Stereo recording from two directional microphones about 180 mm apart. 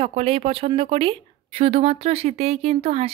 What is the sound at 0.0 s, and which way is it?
Speech, 35° right (ahead or behind).